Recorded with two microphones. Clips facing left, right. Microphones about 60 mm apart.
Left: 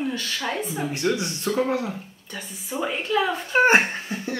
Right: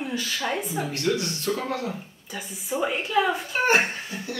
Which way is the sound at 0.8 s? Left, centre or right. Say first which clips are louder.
Left 2 dB; centre.